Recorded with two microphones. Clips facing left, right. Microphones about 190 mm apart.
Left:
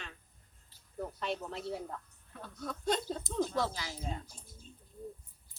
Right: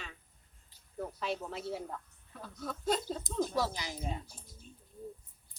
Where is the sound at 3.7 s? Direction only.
15° right (ahead or behind).